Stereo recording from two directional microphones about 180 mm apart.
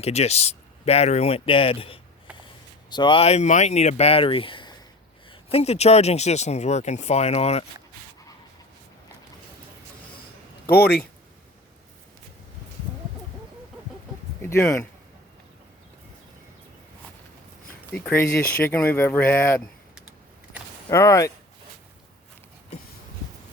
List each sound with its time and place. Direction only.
0.0 s speech: 35° left (ahead or behind)
14.4 s speech: 15° left (ahead or behind)
17.9 s speech: 10° left (ahead or behind)
20.9 s speech: 15° left (ahead or behind)